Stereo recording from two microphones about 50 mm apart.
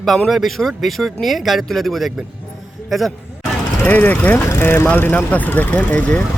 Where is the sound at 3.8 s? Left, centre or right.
Left.